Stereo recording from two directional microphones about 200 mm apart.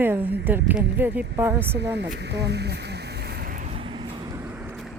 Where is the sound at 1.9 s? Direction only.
55° right (ahead or behind).